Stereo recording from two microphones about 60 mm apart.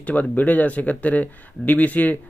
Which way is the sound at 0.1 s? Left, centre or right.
Left.